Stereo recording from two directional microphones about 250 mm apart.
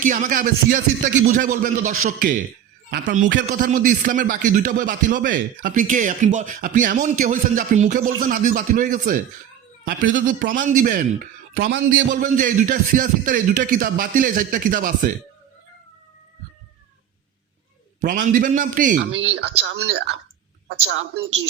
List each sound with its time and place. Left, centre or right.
0.0 s a man's voice: right
18.0 s a man's voice: right
19.6 s speech: right